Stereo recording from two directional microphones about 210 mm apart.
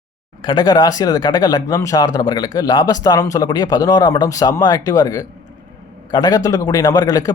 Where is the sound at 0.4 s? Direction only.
20° left (ahead or behind).